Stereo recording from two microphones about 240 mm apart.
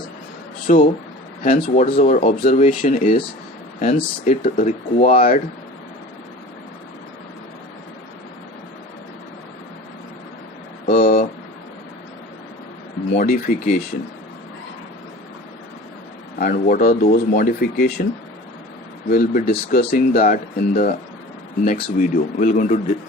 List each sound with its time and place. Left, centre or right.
0.7 s speech: left
10.8 s a sound: left
13.1 s speech: left
16.4 s speech: left
19.1 s speech: left